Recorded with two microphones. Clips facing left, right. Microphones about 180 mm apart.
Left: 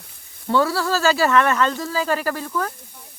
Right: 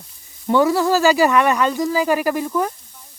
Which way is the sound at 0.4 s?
20° right (ahead or behind).